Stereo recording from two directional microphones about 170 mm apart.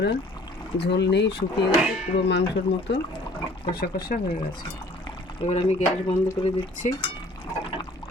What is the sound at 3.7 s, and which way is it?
Speech, 60° left (ahead or behind).